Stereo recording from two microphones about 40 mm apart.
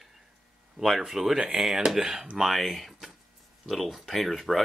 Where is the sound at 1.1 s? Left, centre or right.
Centre.